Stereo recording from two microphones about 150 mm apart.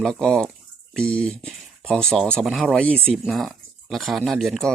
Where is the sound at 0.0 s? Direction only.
5° left (ahead or behind).